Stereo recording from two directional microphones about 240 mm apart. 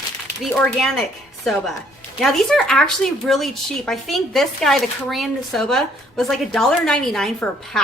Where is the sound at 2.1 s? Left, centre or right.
Centre.